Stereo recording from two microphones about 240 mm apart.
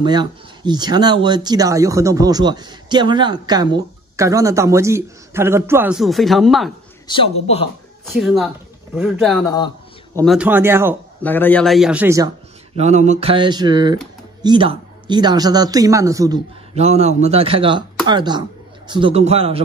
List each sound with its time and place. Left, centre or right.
0.0 s speech: centre
7.1 s speech: left
8.0 s a man's voice: centre
11.2 s a man's voice: centre
12.7 s speech: right
16.7 s speech: right